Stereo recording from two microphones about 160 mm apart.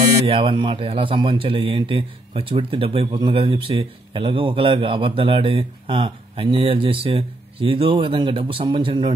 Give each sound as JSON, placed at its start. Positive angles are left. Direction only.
{"t": 0.3, "sound": "a man's voice", "side_deg": -35}